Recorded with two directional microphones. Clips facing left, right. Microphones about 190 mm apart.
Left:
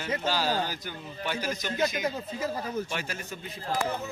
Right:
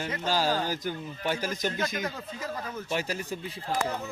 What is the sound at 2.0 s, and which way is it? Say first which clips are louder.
Speech: left 4 dB; 20° left (ahead or behind).